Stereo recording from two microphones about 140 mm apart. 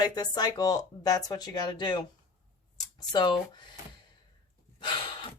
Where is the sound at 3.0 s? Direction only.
35° left (ahead or behind).